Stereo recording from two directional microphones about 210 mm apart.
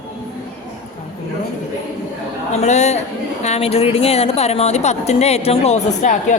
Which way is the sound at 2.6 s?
35° left (ahead or behind).